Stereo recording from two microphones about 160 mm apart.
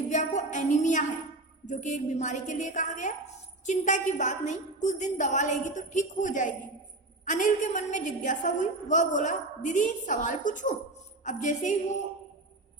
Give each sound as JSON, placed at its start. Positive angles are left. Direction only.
{"t": 0.1, "sound": "a woman's voice", "side_deg": 45}